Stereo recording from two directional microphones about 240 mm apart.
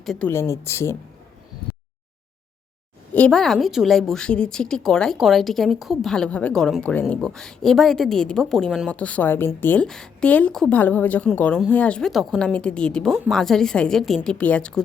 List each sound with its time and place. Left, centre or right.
0.0 s speech: centre
3.2 s a woman's voice: centre